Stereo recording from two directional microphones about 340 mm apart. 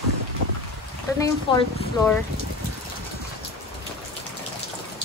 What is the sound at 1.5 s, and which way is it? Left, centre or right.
Speech, centre.